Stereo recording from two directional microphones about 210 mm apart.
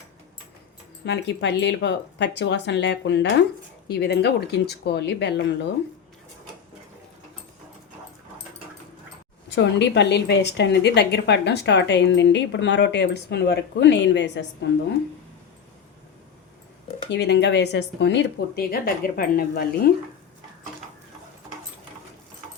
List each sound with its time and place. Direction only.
1.0 s a woman's voice: 55° left (ahead or behind)
9.5 s a woman's voice: 55° left (ahead or behind)
17.1 s speech: 55° left (ahead or behind)